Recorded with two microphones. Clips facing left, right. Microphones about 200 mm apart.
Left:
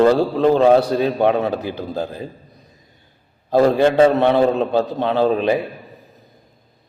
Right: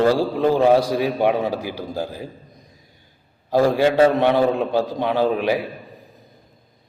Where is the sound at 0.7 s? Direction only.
10° right (ahead or behind).